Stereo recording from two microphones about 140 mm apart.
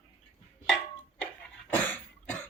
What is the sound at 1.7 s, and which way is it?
Cough, 15° left (ahead or behind).